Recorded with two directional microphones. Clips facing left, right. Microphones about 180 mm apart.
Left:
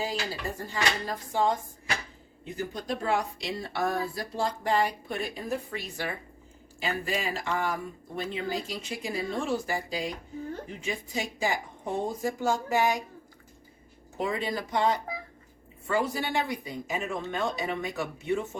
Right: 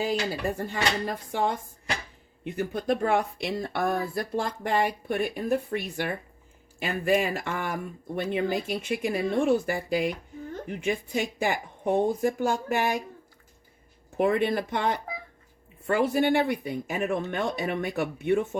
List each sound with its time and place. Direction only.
0.7 s speech: 60° right (ahead or behind)
14.2 s speech: 60° right (ahead or behind)